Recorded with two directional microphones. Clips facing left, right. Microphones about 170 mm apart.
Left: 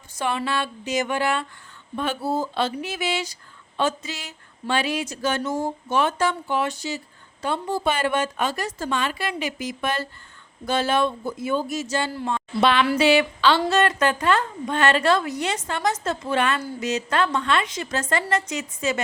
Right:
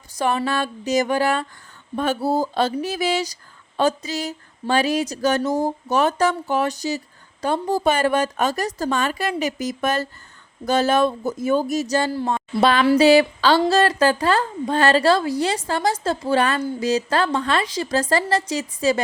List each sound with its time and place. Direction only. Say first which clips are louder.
0.2 s speech: right 4 dB; 40° right (ahead or behind)